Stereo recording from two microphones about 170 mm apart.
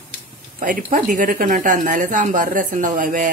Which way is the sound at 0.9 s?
55° right (ahead or behind).